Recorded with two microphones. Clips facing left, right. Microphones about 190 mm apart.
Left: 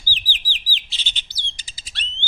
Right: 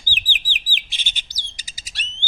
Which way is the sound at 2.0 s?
40° right (ahead or behind).